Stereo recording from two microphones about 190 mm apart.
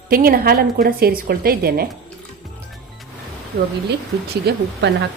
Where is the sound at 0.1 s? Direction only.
50° right (ahead or behind).